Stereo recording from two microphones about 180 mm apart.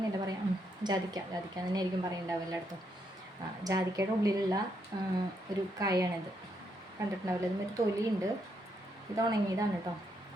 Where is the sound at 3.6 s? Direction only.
20° right (ahead or behind).